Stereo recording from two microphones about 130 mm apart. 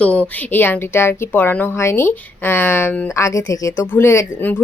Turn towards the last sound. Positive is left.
turn(degrees=15)  # may be behind; listen again after turning